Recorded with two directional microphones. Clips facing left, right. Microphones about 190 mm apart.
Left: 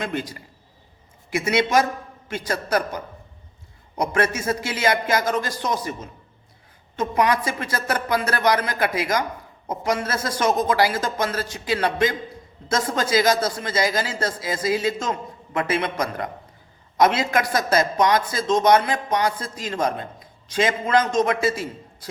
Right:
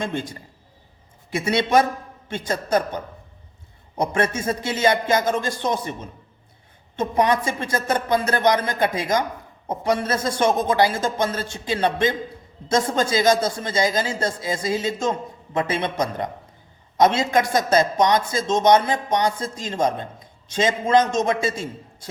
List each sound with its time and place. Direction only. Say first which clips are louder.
0.0 s a man's voice: right 1 dB; 25° right (ahead or behind)
6.9 s a man's voice: right 1 dB; 25° right (ahead or behind)